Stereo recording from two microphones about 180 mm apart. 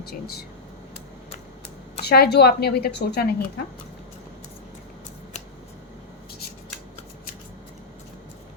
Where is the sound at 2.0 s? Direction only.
65° left (ahead or behind).